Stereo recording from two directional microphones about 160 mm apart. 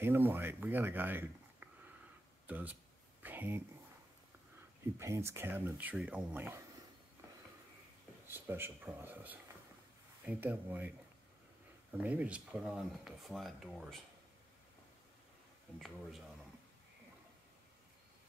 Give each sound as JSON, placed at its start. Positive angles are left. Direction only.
{"t": 0.0, "sound": "speech", "side_deg": -15}
{"t": 3.2, "sound": "a sound", "side_deg": -10}
{"t": 4.9, "sound": "speech", "side_deg": -15}
{"t": 8.3, "sound": "speech", "side_deg": -15}
{"t": 12.0, "sound": "speech", "side_deg": -10}